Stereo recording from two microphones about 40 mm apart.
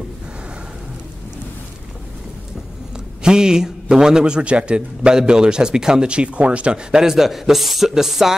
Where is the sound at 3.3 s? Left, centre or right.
Centre.